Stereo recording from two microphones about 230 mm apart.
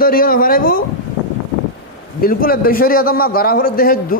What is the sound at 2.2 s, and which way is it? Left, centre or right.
A man's voice, left.